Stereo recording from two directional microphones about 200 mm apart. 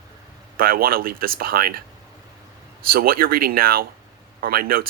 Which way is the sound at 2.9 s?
45° right (ahead or behind).